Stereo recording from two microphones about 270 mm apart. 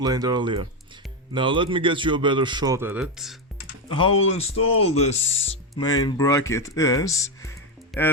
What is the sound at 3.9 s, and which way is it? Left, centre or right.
Speech, centre.